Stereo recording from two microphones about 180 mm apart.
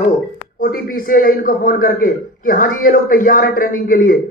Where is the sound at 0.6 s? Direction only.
55° left (ahead or behind).